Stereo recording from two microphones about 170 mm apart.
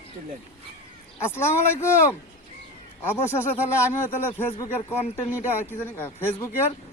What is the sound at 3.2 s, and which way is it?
Speech, 15° left (ahead or behind).